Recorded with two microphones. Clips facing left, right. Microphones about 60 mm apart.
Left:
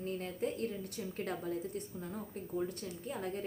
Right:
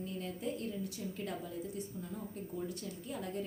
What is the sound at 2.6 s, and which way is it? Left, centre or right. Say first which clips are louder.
Speech: left 5 dB; left.